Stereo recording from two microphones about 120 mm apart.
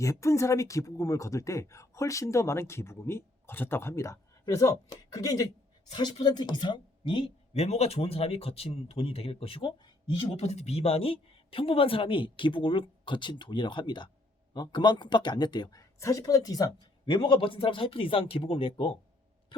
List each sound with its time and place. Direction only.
0.0 s a woman's voice: 25° left (ahead or behind); by 7.3 s 40° left (ahead or behind)
7.5 s speech: 65° left (ahead or behind); by 10.2 s 40° left (ahead or behind)
10.2 s speech: 60° left (ahead or behind); by 16.7 s 30° left (ahead or behind)
17.1 s speech: 45° left (ahead or behind)